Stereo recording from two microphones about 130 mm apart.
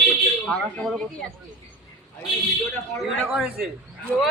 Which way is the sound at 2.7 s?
10° left (ahead or behind).